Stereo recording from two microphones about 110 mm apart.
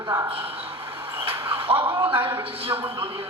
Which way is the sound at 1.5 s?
55° right (ahead or behind).